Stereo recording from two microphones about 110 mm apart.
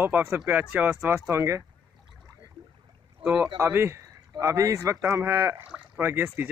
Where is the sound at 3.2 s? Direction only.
15° right (ahead or behind).